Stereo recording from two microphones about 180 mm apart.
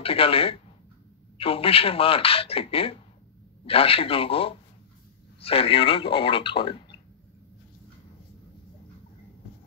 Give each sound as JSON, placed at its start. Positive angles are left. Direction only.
{"t": 0.0, "sound": "speech", "side_deg": 30}